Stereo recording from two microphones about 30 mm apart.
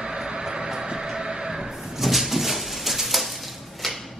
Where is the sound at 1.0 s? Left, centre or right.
Right.